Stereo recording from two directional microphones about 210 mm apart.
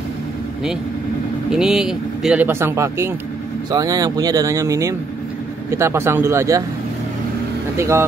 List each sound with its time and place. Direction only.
1.5 s speech: 5° right (ahead or behind)
7.7 s speech: 15° right (ahead or behind)